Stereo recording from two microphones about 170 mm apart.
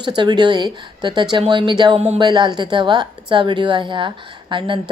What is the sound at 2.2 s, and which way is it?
A woman's voice, 25° right (ahead or behind).